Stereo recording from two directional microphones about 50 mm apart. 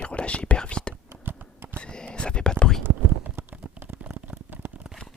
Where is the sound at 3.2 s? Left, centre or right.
Right.